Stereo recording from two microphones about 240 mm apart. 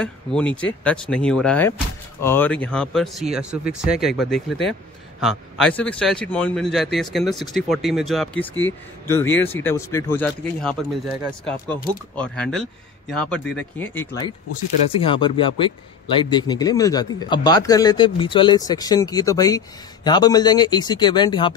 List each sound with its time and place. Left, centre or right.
0.0 s a man's voice: centre
15.0 s a man's voice: left